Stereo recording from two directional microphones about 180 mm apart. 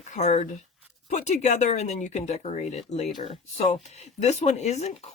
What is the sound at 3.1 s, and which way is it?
Speech, 25° left (ahead or behind).